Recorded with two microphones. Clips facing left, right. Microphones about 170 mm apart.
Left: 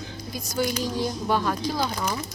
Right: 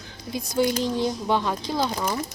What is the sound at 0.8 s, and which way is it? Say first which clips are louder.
Speech: right 2 dB; 20° right (ahead or behind).